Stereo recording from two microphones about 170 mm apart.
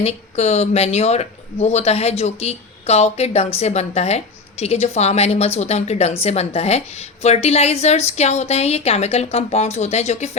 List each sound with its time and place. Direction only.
0.0 s speech: 40° left (ahead or behind)